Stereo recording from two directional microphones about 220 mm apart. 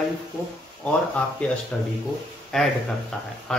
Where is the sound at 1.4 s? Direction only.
5° left (ahead or behind).